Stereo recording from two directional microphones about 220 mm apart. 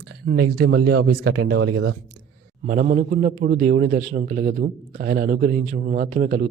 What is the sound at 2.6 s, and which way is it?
A man's voice, 35° right (ahead or behind).